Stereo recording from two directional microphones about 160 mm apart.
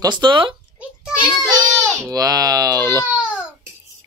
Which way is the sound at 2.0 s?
20° right (ahead or behind).